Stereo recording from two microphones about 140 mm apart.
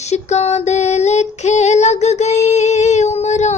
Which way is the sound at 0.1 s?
50° left (ahead or behind).